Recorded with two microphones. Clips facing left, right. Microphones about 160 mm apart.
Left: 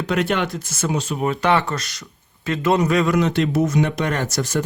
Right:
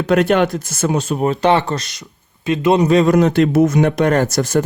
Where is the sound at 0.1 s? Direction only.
45° right (ahead or behind).